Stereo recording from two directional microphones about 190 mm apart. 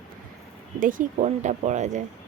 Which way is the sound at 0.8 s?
45° right (ahead or behind).